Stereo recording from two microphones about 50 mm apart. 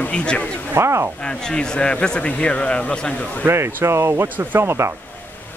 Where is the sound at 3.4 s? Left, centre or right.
Right.